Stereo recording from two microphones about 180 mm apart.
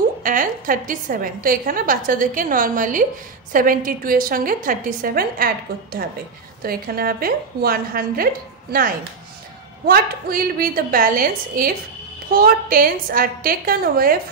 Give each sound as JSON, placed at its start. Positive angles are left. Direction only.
{"t": 0.2, "sound": "a woman's voice", "side_deg": -50}
{"t": 9.8, "sound": "a woman's voice", "side_deg": -55}